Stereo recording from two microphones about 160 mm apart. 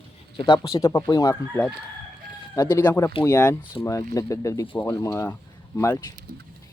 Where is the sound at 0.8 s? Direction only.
20° left (ahead or behind).